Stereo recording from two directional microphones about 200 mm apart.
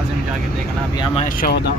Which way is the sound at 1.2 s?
45° left (ahead or behind).